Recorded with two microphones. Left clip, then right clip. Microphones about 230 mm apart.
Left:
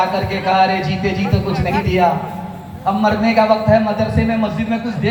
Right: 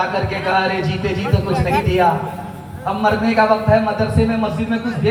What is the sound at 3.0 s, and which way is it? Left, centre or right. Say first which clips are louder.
Speech: even; left.